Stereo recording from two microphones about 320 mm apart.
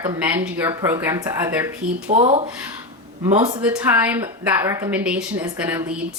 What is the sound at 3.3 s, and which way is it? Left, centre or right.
Speech, centre.